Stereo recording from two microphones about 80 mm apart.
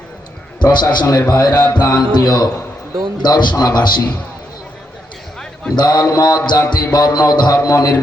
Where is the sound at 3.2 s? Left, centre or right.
Left.